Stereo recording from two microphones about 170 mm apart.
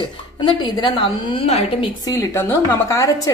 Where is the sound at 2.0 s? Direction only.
20° left (ahead or behind).